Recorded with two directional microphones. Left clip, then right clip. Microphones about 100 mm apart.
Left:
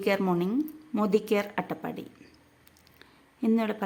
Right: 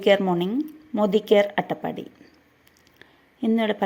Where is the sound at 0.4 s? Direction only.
5° left (ahead or behind).